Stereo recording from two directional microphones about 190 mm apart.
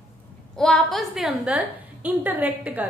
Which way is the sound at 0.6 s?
5° left (ahead or behind).